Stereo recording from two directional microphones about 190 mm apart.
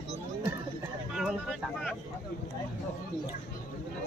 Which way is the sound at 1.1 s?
Centre (ahead or behind).